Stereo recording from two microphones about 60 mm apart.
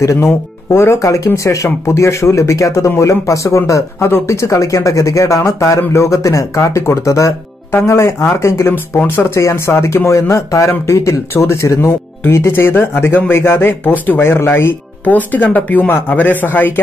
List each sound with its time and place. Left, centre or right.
0.0 s speech: left
8.7 s speech: left